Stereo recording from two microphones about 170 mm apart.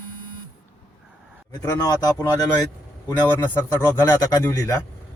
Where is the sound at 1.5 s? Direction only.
20° left (ahead or behind).